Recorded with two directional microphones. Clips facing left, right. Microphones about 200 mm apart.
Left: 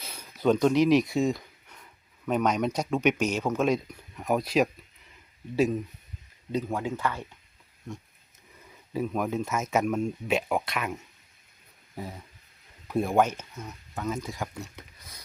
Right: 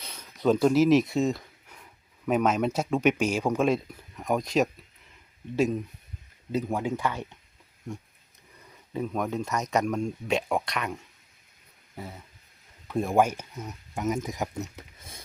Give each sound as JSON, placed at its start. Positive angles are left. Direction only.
{"t": 0.0, "sound": "a sound", "side_deg": 5}
{"t": 2.2, "sound": "speech", "side_deg": -5}
{"t": 6.5, "sound": "speech", "side_deg": -10}
{"t": 8.9, "sound": "speech", "side_deg": 5}
{"t": 11.9, "sound": "a sound", "side_deg": 15}
{"t": 12.9, "sound": "speech", "side_deg": 5}
{"t": 13.1, "sound": "speech", "side_deg": -10}